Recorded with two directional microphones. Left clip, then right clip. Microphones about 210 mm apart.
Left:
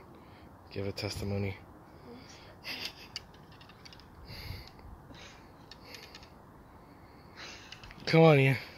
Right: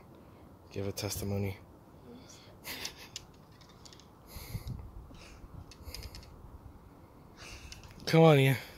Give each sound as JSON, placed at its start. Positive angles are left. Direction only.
{"t": 0.7, "sound": "speech", "side_deg": -10}
{"t": 2.1, "sound": "gasp", "side_deg": -15}
{"t": 7.3, "sound": "a sound", "side_deg": -20}
{"t": 8.0, "sound": "speech", "side_deg": -5}